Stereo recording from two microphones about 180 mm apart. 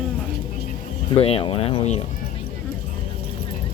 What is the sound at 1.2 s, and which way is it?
Speech, 30° left (ahead or behind).